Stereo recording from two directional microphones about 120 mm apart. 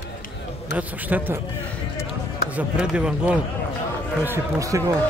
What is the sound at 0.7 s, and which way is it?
Speech, 15° right (ahead or behind).